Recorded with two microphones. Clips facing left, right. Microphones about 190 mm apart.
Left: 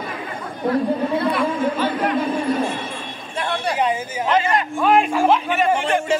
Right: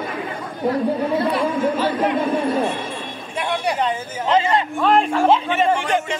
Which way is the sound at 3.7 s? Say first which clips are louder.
Left 2 dB; 10° left (ahead or behind).